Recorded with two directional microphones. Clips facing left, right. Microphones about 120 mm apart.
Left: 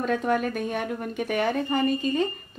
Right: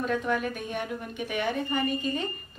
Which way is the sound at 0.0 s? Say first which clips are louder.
Left 3 dB; 45° left (ahead or behind).